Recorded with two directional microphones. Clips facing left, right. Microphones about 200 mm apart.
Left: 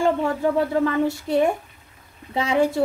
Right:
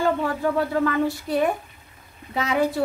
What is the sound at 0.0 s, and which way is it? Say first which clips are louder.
A woman's voice: left 2 dB; 25° left (ahead or behind).